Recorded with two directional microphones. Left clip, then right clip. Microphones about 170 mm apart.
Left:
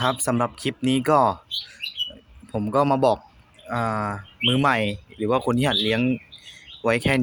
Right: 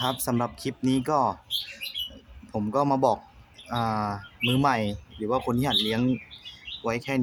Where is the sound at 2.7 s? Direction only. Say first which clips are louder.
Left 4 dB; 15° left (ahead or behind).